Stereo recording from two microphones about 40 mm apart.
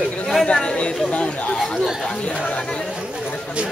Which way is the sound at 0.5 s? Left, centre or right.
Centre.